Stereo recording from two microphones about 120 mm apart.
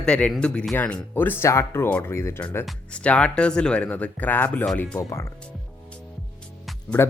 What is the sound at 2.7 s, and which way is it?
Speech, 10° left (ahead or behind).